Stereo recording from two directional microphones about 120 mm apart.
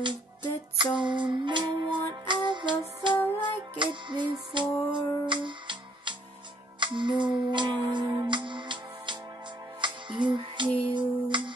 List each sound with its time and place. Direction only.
0.0 s music: 40° right (ahead or behind)